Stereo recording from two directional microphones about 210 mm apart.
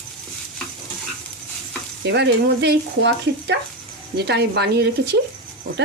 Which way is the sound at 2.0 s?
55° right (ahead or behind).